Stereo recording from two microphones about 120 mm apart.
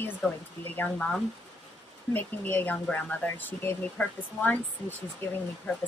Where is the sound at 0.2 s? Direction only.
10° left (ahead or behind).